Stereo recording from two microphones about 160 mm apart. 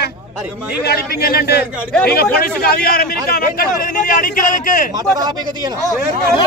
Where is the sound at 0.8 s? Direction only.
75° left (ahead or behind); by 4.9 s 55° left (ahead or behind).